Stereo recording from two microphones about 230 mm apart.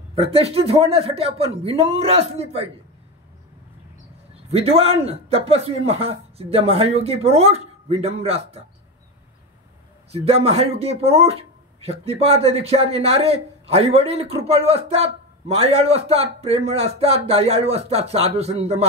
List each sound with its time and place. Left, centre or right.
0.1 s a man's voice: right
4.5 s a man's voice: right
10.1 s a man's voice: right